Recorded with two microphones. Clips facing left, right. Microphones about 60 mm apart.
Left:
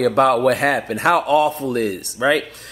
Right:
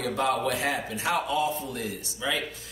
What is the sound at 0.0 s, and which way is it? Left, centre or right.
Speech, left.